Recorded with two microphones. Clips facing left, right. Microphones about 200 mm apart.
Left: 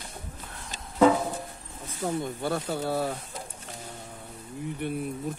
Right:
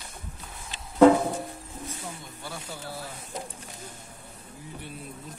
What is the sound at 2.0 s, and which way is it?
Speech, 55° left (ahead or behind).